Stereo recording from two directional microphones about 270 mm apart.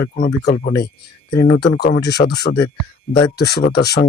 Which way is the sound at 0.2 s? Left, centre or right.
Left.